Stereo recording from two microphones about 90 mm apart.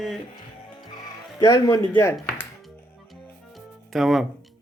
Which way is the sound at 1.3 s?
45° left (ahead or behind).